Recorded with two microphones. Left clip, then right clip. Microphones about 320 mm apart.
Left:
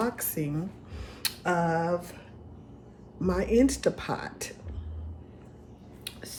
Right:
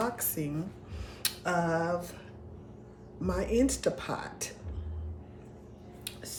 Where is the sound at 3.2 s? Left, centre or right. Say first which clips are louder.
Left 4 dB; centre.